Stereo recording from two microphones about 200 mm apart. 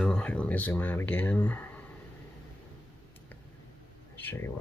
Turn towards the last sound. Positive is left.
turn(degrees=10)  # may be behind; listen again after turning